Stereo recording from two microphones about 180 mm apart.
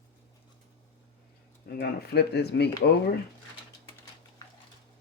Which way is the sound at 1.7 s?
60° left (ahead or behind).